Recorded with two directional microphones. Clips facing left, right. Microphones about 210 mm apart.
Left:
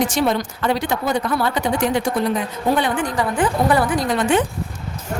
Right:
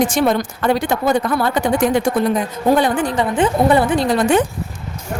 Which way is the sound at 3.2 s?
25° right (ahead or behind).